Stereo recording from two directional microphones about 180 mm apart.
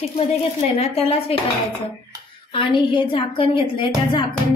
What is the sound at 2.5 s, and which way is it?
A woman's voice, 25° left (ahead or behind).